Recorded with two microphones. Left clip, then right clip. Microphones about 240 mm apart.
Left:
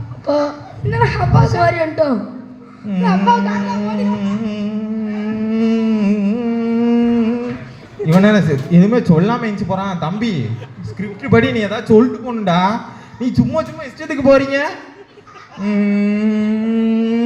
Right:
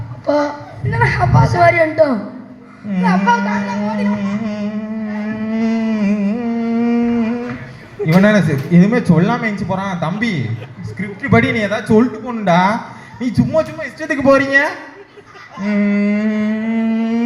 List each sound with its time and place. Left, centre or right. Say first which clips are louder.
0.3 s a man's voice: right 1 dB; left
2.9 s a sound: even; left
8.0 s a man's voice: even; left
15.6 s humming: even; left